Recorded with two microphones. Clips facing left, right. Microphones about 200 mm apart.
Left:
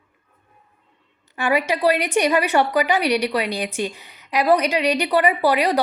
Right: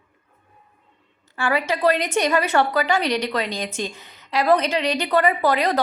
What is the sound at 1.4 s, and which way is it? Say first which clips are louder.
A woman's voice: left 2 dB; 15° left (ahead or behind).